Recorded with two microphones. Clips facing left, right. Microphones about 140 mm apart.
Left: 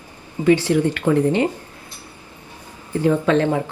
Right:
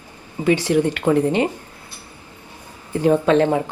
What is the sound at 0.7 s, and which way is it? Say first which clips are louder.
Speech: even; 15° right (ahead or behind).